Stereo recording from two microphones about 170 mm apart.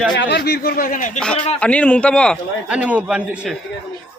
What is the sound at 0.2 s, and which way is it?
A man's voice, 75° left (ahead or behind).